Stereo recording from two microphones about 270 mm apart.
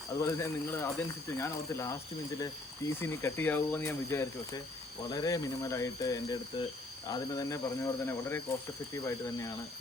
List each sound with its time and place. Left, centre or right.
0.2 s speech: centre